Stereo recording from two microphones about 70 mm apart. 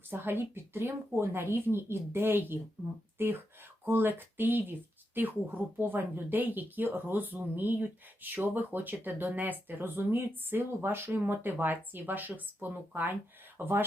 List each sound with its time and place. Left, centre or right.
0.1 s speech: right